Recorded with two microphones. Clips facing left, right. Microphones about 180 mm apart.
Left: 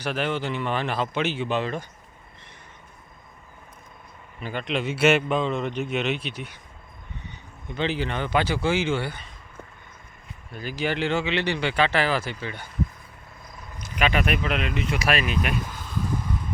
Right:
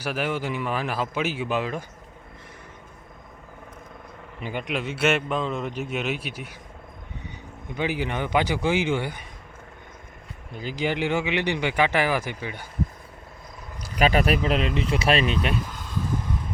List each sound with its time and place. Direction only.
0.0 s speech: 5° right (ahead or behind)
4.4 s speech: 15° right (ahead or behind)
4.8 s a man's voice: centre (ahead or behind)
7.8 s speech: 10° right (ahead or behind)
10.5 s speech: 20° right (ahead or behind)
13.8 s speech: 35° right (ahead or behind)